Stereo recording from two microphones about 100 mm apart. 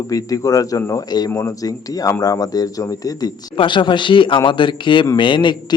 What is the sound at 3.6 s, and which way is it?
Speech, 55° left (ahead or behind).